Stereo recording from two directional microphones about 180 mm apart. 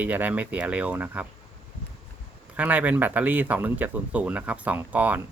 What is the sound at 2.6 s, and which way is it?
Speech, 10° right (ahead or behind).